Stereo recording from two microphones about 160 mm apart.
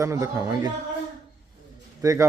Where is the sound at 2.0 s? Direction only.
20° right (ahead or behind).